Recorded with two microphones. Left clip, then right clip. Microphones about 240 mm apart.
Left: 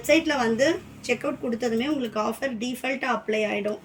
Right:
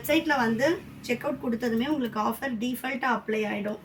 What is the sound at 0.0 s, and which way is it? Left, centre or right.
A woman's voice, centre.